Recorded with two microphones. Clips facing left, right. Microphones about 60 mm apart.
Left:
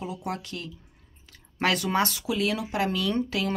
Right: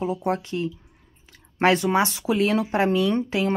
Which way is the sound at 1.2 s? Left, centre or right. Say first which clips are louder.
Right 6 dB; right.